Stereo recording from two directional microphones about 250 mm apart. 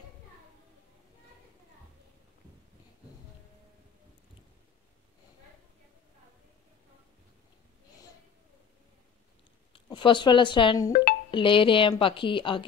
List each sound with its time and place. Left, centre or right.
9.7 s a woman's voice: centre